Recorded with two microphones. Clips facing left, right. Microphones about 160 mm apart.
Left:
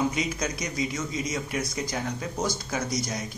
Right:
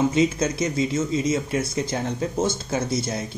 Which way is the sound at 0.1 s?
25° right (ahead or behind).